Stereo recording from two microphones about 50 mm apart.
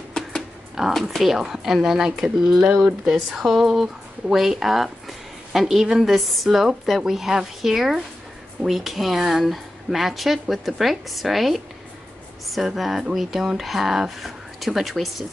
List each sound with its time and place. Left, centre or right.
0.8 s speech: centre
12.6 s speech: centre